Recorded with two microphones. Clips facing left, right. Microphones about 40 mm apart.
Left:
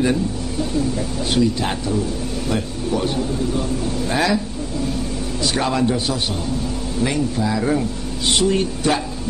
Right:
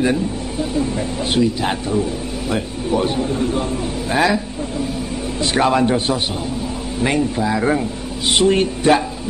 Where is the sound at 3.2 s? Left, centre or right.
Right.